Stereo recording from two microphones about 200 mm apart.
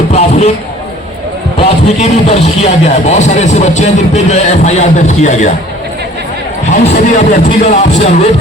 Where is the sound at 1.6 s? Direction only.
30° left (ahead or behind).